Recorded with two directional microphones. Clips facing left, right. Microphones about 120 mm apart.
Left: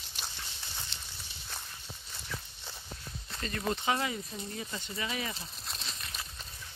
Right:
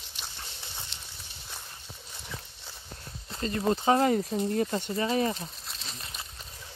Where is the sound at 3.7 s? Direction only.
40° right (ahead or behind).